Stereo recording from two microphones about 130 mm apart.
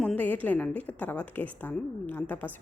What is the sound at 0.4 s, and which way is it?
A woman's voice, 10° left (ahead or behind).